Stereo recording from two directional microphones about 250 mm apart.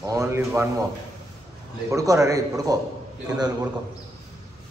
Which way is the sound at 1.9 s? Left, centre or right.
Centre.